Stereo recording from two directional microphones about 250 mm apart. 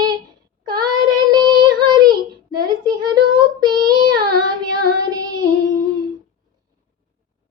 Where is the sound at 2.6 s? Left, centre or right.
Centre.